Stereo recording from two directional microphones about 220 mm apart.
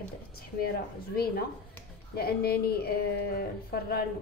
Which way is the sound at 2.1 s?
45° left (ahead or behind).